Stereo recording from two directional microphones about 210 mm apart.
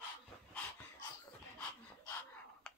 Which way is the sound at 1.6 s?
10° left (ahead or behind).